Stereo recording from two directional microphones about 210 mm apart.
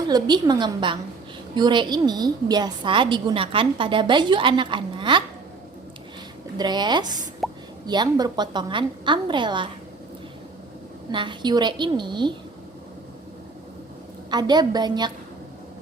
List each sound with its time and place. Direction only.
0.1 s a woman's voice: 20° right (ahead or behind)
6.6 s a woman's voice: 20° right (ahead or behind)
7.4 s a sound: centre (ahead or behind)
7.9 s a woman's voice: 20° right (ahead or behind)
11.1 s a woman's voice: 20° right (ahead or behind)
14.3 s a woman's voice: 20° right (ahead or behind)